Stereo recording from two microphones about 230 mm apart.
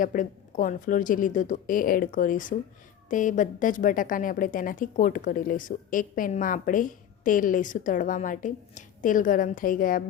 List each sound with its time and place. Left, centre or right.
0.0 s a woman's voice: left